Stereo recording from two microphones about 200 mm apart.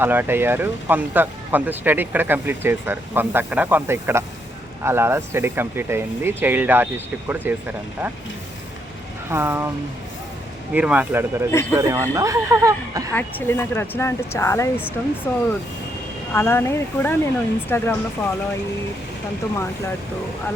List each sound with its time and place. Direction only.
0.0 s speech: 10° right (ahead or behind)
9.3 s speech: 10° right (ahead or behind)
10.8 s speech: 5° right (ahead or behind)
13.1 s speech: 10° left (ahead or behind)